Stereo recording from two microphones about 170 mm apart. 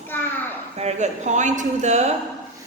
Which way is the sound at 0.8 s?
40° right (ahead or behind).